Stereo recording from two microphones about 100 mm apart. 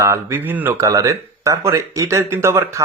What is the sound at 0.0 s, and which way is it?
Speech, 30° right (ahead or behind).